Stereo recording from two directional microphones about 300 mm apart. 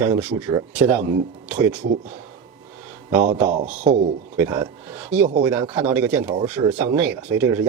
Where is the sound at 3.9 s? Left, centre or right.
Centre.